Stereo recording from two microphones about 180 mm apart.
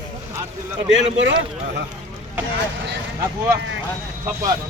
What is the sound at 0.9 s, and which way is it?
Speech, 90° right.